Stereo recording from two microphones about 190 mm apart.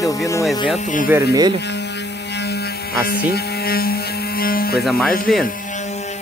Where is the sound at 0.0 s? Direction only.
15° left (ahead or behind).